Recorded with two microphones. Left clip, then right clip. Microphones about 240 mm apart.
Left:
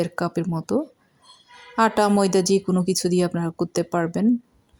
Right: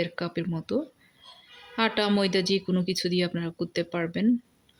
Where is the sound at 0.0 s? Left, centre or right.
Centre.